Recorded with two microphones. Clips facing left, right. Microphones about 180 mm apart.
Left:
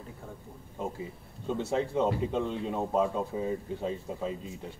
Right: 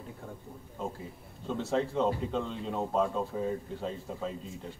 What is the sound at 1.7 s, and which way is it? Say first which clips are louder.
Speech: even; 10° left (ahead or behind).